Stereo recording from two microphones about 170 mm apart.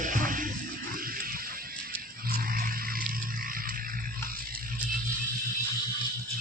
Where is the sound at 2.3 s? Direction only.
55° right (ahead or behind).